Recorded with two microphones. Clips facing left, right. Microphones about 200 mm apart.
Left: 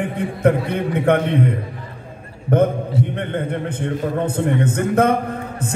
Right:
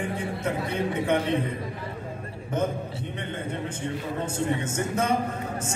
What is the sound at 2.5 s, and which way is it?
A man's voice, 60° left (ahead or behind).